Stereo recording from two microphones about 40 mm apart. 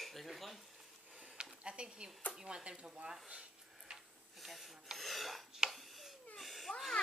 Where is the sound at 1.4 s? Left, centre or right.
Right.